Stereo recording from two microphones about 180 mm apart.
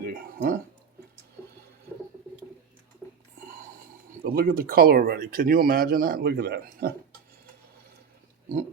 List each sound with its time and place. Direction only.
0.0 s a sound: 55° right (ahead or behind)
3.0 s whispering: 10° right (ahead or behind)
4.2 s speech: 55° right (ahead or behind)